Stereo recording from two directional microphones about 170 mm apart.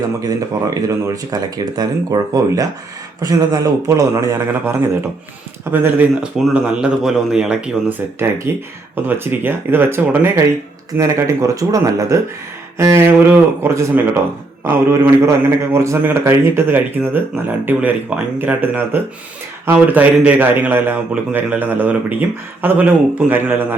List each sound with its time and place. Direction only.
0.2 s a man's voice: 20° right (ahead or behind)